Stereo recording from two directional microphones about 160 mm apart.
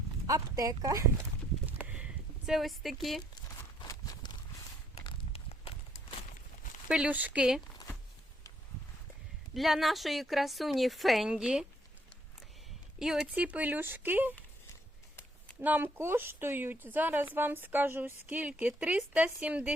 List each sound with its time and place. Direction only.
0.3 s speech: 20° right (ahead or behind)
1.8 s a sound: 10° right (ahead or behind)
2.5 s a woman's voice: centre (ahead or behind)
3.8 s horse: 25° left (ahead or behind)
5.0 s a sound: 35° left (ahead or behind)
6.8 s speech: 5° right (ahead or behind)
9.6 s a woman's voice: centre (ahead or behind)
13.0 s speech: 5° right (ahead or behind)
15.6 s speech: 10° right (ahead or behind)